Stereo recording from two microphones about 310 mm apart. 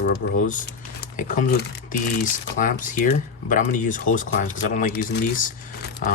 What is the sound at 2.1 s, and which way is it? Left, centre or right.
Speech, left.